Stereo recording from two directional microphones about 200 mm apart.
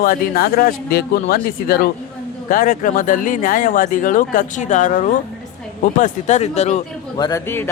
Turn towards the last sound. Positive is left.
turn(degrees=10)  # may be behind; listen again after turning